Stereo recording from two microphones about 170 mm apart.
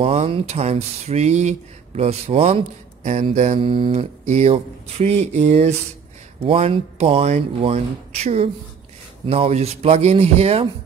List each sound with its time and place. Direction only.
0.0 s speech: 35° right (ahead or behind)